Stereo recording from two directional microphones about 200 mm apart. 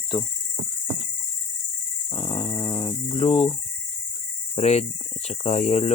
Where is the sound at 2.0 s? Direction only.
20° left (ahead or behind).